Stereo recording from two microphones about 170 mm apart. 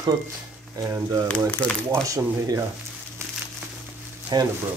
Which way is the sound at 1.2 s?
5° left (ahead or behind).